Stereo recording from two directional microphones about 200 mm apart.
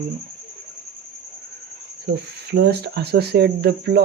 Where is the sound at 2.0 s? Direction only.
55° right (ahead or behind).